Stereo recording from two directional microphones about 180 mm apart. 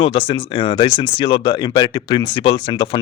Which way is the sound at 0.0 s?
30° left (ahead or behind).